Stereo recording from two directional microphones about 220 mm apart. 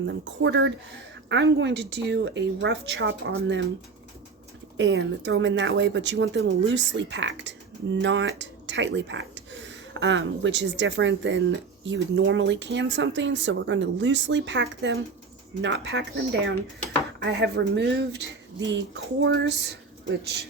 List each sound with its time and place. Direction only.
0.0 s a woman's voice: 55° right (ahead or behind)
4.8 s a woman's voice: 55° right (ahead or behind)